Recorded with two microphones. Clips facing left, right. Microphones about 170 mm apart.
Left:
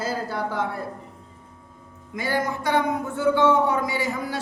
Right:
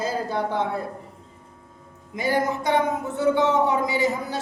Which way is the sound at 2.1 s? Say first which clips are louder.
Right 2 dB; 20° right (ahead or behind).